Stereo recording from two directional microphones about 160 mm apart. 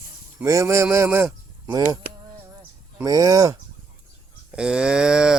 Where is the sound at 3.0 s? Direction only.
25° right (ahead or behind).